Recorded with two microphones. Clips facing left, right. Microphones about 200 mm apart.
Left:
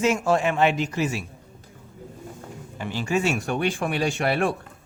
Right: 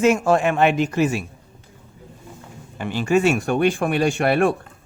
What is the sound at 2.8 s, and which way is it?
Speech, 55° right (ahead or behind).